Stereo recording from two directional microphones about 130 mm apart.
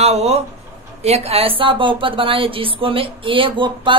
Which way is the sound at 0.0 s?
55° right (ahead or behind).